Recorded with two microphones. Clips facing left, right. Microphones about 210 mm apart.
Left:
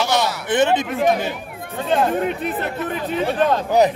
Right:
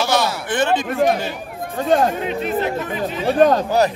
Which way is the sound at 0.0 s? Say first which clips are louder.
Right 1 dB; 20° left (ahead or behind).